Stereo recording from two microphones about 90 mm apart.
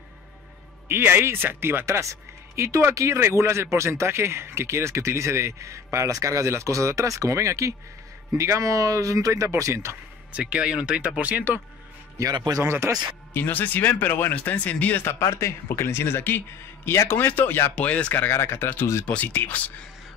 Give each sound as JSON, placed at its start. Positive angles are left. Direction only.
{"t": 0.8, "sound": "a woman's voice", "side_deg": -25}
{"t": 10.3, "sound": "speech", "side_deg": -10}
{"t": 12.4, "sound": "speech", "side_deg": -50}
{"t": 12.6, "sound": "a woman's voice", "side_deg": -30}
{"t": 13.3, "sound": "speech", "side_deg": 20}